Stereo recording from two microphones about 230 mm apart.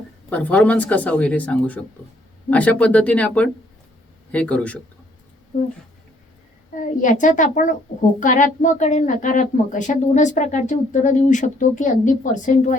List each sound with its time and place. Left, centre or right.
0.3 s speech: centre
7.0 s a woman's voice: left